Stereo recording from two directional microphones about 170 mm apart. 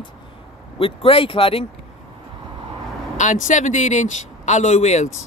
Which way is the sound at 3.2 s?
45° left (ahead or behind).